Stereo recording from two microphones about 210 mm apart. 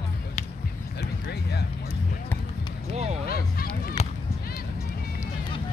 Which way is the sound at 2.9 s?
30° right (ahead or behind).